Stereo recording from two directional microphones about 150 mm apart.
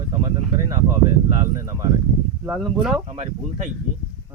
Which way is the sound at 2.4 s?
5° right (ahead or behind).